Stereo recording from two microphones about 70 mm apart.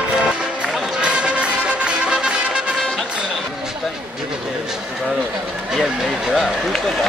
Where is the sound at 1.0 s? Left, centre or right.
Centre.